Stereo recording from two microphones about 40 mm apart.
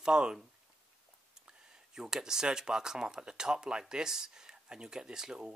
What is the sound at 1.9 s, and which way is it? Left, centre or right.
Speech, centre.